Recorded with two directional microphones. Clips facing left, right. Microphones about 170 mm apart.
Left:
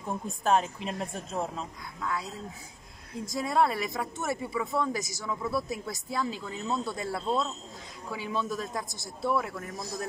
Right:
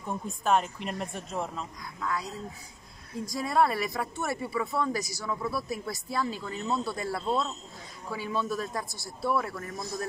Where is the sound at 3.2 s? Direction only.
20° left (ahead or behind).